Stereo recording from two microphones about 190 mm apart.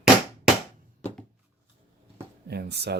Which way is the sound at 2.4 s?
60° right (ahead or behind).